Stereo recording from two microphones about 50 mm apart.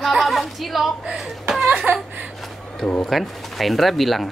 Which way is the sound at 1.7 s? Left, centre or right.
Right.